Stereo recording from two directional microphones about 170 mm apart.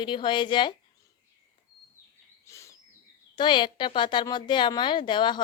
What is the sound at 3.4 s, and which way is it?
A woman's voice, 30° left (ahead or behind).